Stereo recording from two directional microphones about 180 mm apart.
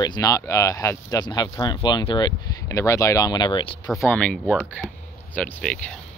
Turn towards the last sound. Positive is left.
turn(degrees=5)  # may be behind; listen again after turning